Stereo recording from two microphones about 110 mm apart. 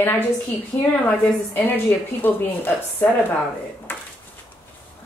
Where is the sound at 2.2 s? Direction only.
15° left (ahead or behind).